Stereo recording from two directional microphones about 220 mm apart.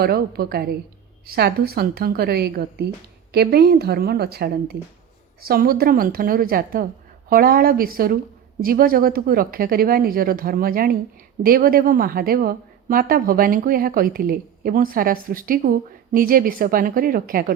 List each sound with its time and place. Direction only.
0.0 s a woman's voice: 45° right (ahead or behind)